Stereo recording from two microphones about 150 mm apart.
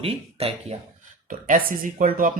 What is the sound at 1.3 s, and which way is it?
Speech, 70° right (ahead or behind).